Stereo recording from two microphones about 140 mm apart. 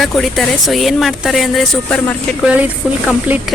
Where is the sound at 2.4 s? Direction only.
10° right (ahead or behind).